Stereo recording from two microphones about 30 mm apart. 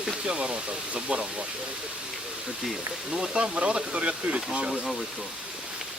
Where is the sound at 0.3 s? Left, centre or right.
Right.